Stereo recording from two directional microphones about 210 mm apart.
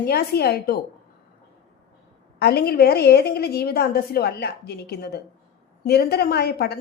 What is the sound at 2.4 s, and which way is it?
A woman's voice, 50° left (ahead or behind).